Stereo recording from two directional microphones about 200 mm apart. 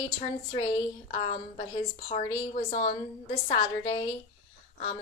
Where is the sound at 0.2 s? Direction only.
30° left (ahead or behind).